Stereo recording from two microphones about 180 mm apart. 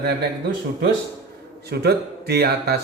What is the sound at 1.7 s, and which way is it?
A man's voice, 65° right (ahead or behind).